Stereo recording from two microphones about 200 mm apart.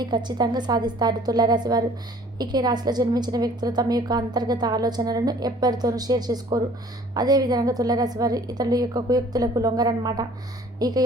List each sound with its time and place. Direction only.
0.0 s a woman's voice: 20° right (ahead or behind)